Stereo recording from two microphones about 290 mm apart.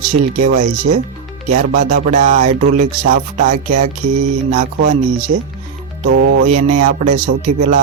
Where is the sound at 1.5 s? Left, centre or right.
Right.